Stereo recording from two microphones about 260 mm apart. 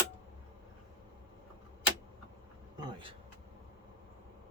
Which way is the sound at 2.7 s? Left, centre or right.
Centre.